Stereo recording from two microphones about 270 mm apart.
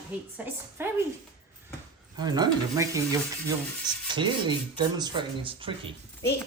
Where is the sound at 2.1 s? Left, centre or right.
Centre.